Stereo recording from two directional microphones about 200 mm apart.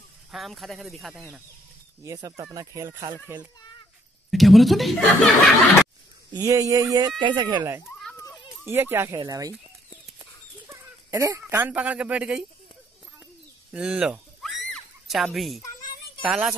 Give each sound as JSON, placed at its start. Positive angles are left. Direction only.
{"t": 0.3, "sound": "speech", "side_deg": 0}
{"t": 2.0, "sound": "speech", "side_deg": -15}
{"t": 4.3, "sound": "speech", "side_deg": 0}
{"t": 6.3, "sound": "speech", "side_deg": -15}
{"t": 8.2, "sound": "children playing", "side_deg": 15}
{"t": 8.6, "sound": "speech", "side_deg": -10}
{"t": 10.7, "sound": "speech", "side_deg": -15}
{"t": 13.7, "sound": "a sound", "side_deg": -5}
{"t": 16.3, "sound": "speech", "side_deg": -5}